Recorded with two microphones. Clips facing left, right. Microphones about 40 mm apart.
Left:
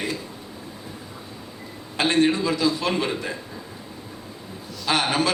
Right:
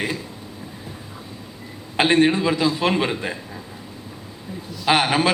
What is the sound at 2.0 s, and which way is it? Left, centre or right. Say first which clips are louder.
A man's voice: right 3 dB; right.